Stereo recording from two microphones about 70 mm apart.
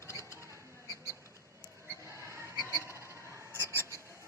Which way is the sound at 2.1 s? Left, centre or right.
Right.